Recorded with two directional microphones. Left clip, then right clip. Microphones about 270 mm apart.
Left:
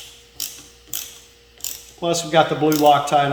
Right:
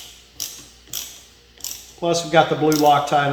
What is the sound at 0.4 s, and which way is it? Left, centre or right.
Ratchet, centre.